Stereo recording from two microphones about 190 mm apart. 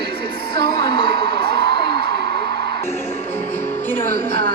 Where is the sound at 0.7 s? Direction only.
25° left (ahead or behind).